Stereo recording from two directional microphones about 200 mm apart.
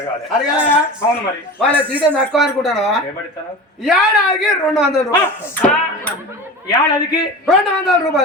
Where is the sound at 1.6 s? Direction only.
10° right (ahead or behind); by 7.3 s 20° left (ahead or behind).